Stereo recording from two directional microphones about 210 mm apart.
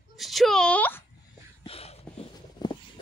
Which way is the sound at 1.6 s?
25° left (ahead or behind).